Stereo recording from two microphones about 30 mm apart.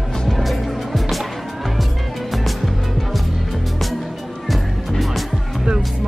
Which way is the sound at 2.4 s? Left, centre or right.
Centre.